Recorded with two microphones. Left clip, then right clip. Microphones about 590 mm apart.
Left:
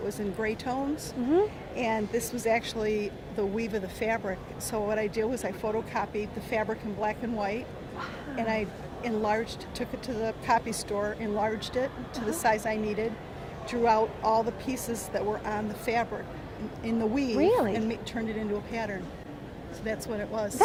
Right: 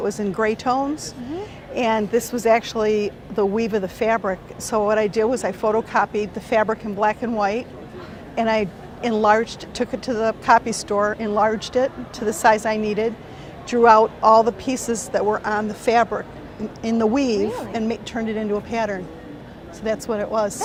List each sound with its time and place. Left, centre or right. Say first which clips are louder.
0.1 s speech: right 10 dB; right